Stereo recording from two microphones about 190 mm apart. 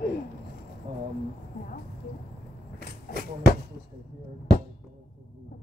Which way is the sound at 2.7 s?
50° left (ahead or behind).